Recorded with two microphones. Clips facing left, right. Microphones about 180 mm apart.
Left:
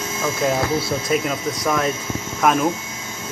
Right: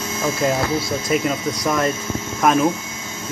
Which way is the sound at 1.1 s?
Centre (ahead or behind).